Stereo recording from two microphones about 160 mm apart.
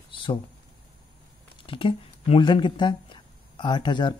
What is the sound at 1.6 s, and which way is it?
Speech, 35° left (ahead or behind).